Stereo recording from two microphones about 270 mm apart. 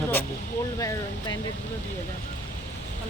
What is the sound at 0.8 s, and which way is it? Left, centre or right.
Speech, centre.